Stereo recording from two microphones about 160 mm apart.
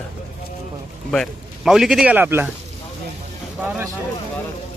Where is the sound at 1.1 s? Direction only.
Centre (ahead or behind).